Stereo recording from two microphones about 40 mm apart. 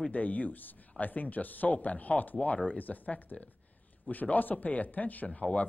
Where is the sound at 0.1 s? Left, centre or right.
Left.